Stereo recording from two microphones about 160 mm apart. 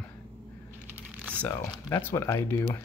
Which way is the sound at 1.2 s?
10° left (ahead or behind).